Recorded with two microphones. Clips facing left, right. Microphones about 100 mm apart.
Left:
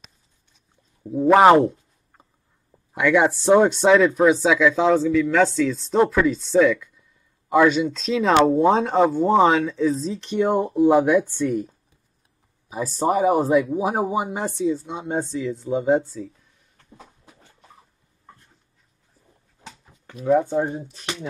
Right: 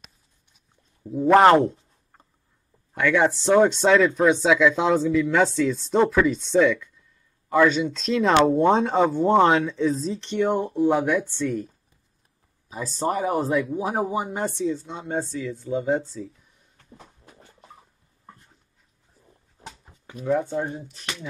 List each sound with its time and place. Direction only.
1.2 s a sound: 5° left (ahead or behind)
2.9 s speech: 10° left (ahead or behind)
7.4 s speech: 10° left (ahead or behind)
13.7 s speech: 20° left (ahead or behind)
20.5 s speech: 25° left (ahead or behind)